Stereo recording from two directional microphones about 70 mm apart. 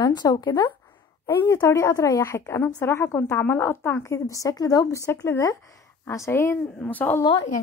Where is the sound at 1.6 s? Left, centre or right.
Left.